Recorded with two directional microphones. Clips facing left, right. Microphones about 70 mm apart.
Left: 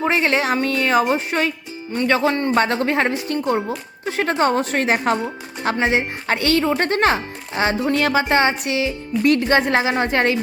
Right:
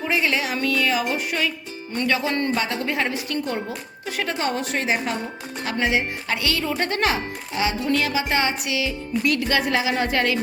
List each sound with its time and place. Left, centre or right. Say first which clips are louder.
0.0 s speech: left 4 dB; left
4.0 s speech: left 7 dB; left